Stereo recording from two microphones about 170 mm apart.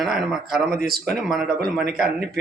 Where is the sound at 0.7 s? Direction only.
65° right (ahead or behind).